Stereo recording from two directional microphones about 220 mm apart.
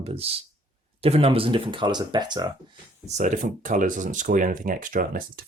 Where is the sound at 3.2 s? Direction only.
35° right (ahead or behind).